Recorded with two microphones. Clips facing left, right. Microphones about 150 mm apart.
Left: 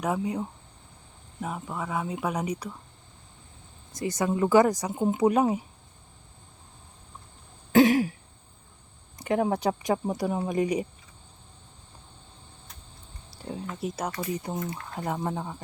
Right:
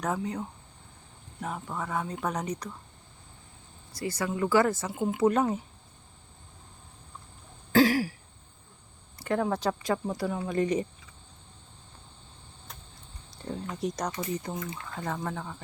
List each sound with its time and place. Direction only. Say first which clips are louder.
0.0 s speech: left 3 dB; 10° left (ahead or behind)
3.9 s speech: left 4 dB; 20° left (ahead or behind)
7.7 s throat clearing: left 3 dB; 20° left (ahead or behind)
9.1 s speech: left 3 dB; 15° left (ahead or behind)
13.4 s a sound: right 1 dB; 5° left (ahead or behind)
14.2 s speech: left 2 dB; 20° left (ahead or behind)